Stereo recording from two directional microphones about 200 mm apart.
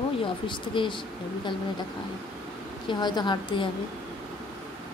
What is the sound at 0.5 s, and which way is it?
Speech, 25° left (ahead or behind).